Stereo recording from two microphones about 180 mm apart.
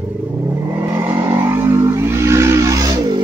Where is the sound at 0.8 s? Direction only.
15° right (ahead or behind).